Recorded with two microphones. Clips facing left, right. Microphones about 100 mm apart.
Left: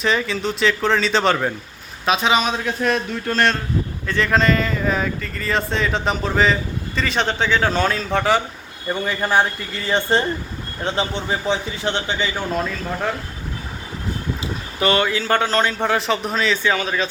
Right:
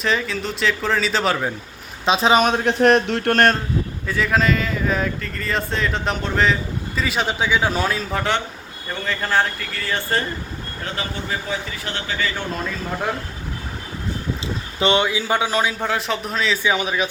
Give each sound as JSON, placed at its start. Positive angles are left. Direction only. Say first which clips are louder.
{"t": 0.0, "sound": "speech", "louder": "left 2 dB", "side_deg": 0}
{"t": 2.0, "sound": "speech", "louder": "right 2 dB", "side_deg": -35}
{"t": 2.4, "sound": "speech", "louder": "right 5 dB", "side_deg": -60}
{"t": 4.0, "sound": "speech", "louder": "left 2 dB", "side_deg": -5}
{"t": 9.0, "sound": "a man's voice", "louder": "left 1 dB", "side_deg": 15}
{"t": 14.4, "sound": "speech", "louder": "even", "side_deg": -20}
{"t": 16.6, "sound": "speech", "louder": "even", "side_deg": -15}